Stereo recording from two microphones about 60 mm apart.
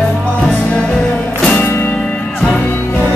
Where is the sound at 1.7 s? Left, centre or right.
Left.